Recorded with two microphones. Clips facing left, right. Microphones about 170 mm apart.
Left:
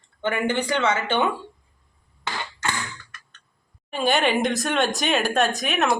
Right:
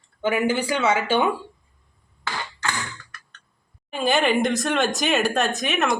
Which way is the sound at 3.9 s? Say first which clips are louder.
Right 1 dB; centre (ahead or behind).